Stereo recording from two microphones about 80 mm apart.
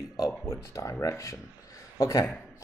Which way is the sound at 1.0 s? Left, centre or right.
Left.